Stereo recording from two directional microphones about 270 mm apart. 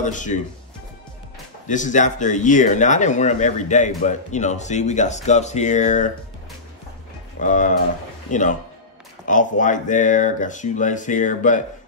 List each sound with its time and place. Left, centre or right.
0.0 s speech: left
1.7 s speech: left
7.3 s speech: left